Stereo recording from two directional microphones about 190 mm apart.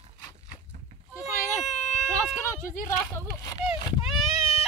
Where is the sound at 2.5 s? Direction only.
15° left (ahead or behind).